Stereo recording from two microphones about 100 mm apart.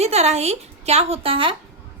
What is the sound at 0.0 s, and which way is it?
A woman's voice, 90° right.